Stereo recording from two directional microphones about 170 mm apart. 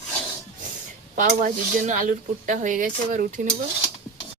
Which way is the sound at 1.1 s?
50° right (ahead or behind).